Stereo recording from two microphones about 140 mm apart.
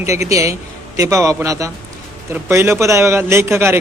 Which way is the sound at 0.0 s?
20° right (ahead or behind).